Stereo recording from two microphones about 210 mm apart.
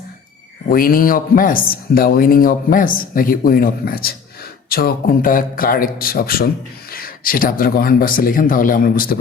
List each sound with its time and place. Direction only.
0.7 s speech: 45° left (ahead or behind)